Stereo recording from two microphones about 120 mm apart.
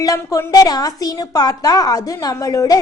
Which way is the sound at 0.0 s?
30° left (ahead or behind).